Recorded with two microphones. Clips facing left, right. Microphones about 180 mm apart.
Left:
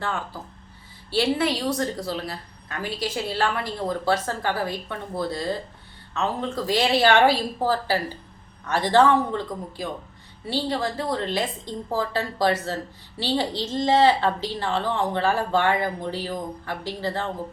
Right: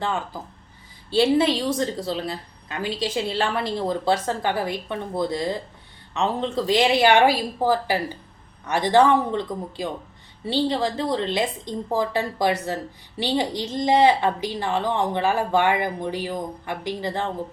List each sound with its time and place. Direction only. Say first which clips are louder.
1.1 s a woman's voice: right 4 dB; 25° right (ahead or behind)